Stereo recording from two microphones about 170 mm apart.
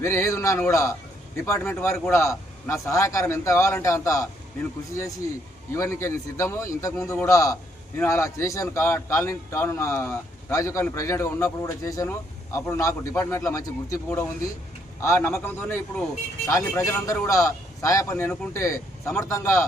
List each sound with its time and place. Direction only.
0.0 s a man's voice: 15° left (ahead or behind)
5.7 s a man's voice: 15° left (ahead or behind)